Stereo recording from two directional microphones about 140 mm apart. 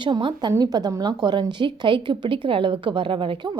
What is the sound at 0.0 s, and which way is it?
A woman's voice, 35° right (ahead or behind).